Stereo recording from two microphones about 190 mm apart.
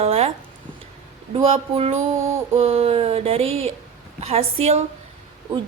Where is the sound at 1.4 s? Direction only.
30° right (ahead or behind).